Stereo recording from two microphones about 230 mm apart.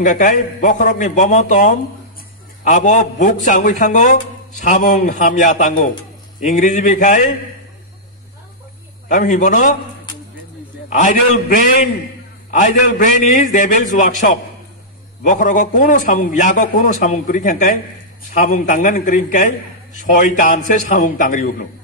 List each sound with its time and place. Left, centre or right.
0.0 s a man's voice: left
9.1 s a man's voice: left
10.9 s a man's voice: left